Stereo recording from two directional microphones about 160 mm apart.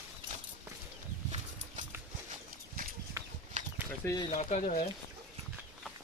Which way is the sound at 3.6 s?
50° right (ahead or behind).